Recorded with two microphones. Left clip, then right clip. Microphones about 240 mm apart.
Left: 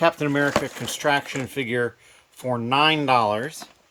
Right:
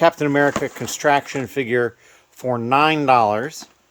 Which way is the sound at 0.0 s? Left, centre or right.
Right.